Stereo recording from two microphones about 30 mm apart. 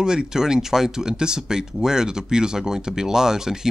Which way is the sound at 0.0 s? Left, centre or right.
Right.